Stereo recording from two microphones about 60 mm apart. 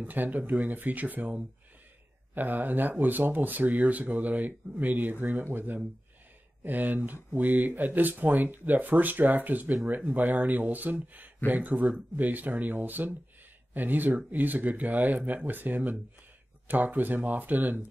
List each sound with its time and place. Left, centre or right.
0.0 s speech: right